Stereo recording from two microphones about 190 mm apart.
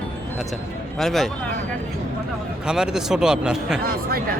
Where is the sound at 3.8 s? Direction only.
50° right (ahead or behind).